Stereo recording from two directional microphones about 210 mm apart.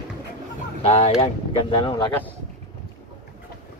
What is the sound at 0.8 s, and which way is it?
Speech, 30° left (ahead or behind).